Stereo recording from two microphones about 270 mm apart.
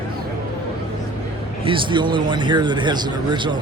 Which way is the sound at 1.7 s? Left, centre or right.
Centre.